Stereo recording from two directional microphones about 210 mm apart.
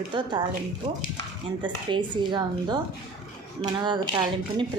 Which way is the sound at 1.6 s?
20° right (ahead or behind).